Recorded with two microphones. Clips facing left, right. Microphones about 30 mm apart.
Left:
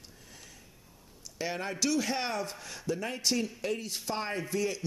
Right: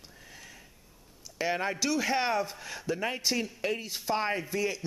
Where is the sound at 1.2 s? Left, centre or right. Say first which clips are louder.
Right 5 dB; centre.